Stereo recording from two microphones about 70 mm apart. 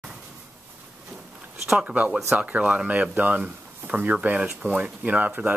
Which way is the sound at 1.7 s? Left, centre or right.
Centre.